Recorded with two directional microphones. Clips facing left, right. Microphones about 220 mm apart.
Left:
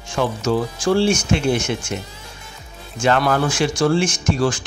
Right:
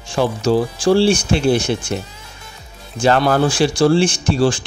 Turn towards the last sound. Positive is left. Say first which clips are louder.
# right 3 dB
turn(degrees=-30)  # may be behind; listen again after turning